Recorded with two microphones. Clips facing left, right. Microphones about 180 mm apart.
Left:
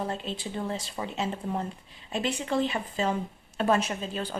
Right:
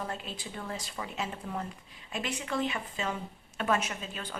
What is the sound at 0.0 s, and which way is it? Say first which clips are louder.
A woman's voice: left 6 dB; 25° left (ahead or behind).